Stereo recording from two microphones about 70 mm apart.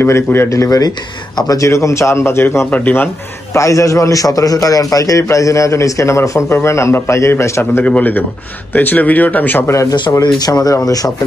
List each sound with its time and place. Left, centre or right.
0.0 s a man's voice: left
0.5 s speech: left
1.7 s a man's voice: left
3.5 s a man's voice: left
7.8 s speech: left
10.2 s speech: left